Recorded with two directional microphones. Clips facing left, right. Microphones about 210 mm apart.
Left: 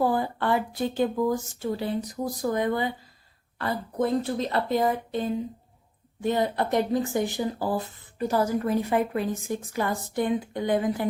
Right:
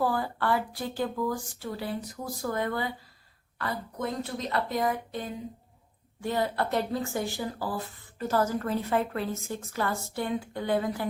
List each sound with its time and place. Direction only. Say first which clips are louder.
0.0 s speech: left 3 dB; 20° left (ahead or behind)
3.6 s a woman's voice: left 6 dB; 30° left (ahead or behind)